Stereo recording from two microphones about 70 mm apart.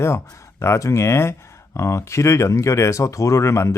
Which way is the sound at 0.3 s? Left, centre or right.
Left.